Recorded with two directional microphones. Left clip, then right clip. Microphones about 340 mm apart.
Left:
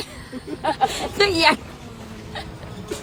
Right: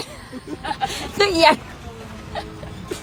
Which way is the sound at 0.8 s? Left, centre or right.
Left.